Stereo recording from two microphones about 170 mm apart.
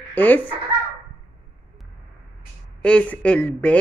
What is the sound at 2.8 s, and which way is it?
A woman's voice, 5° left (ahead or behind).